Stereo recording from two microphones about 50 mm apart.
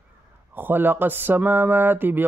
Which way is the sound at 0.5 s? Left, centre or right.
Right.